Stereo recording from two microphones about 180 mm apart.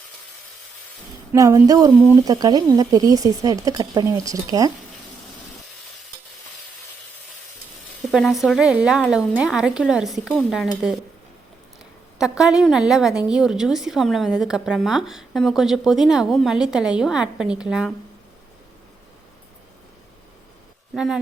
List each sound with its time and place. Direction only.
1.3 s speech: 15° right (ahead or behind)
8.0 s a woman's voice: centre (ahead or behind)
12.2 s a woman's voice: 5° right (ahead or behind)
20.9 s a woman's voice: 5° right (ahead or behind)